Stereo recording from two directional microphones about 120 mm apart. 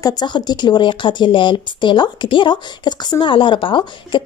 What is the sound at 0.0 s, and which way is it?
Speech, 35° left (ahead or behind).